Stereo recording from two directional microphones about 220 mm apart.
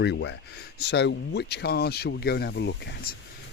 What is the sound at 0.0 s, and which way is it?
Speech, 50° left (ahead or behind).